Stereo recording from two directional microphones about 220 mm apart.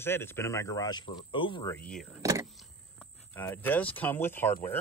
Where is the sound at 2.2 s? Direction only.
15° right (ahead or behind).